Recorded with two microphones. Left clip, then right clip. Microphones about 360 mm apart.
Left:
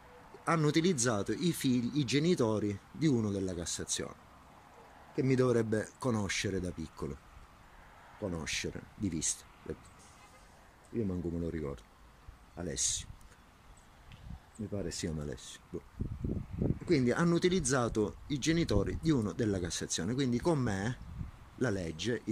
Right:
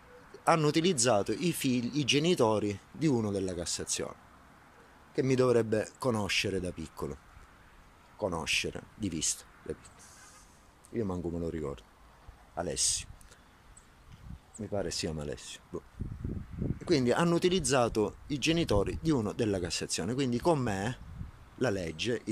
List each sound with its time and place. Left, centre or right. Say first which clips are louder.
0.5 s speech: right 4 dB; centre
8.3 s speech: right 6 dB; centre
10.9 s speech: right 2 dB; right
11.4 s speech: right 3 dB; centre
14.9 s speech: right 4 dB; centre
16.8 s speech: right 3 dB; centre